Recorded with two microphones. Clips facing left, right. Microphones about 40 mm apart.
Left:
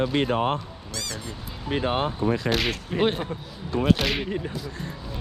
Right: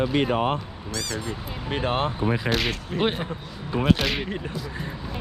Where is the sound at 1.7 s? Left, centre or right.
Right.